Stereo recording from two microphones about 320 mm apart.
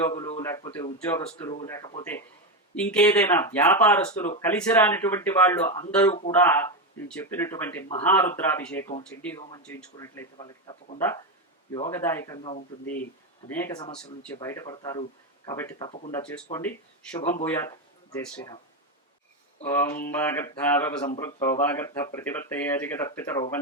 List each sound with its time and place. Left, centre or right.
0.1 s speech: centre
2.7 s speech: centre; by 13.0 s left
13.5 s speech: centre
19.6 s speech: centre